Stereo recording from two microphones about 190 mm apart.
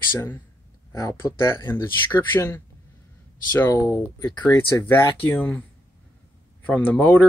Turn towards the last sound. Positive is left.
turn(degrees=10)  # may be behind; listen again after turning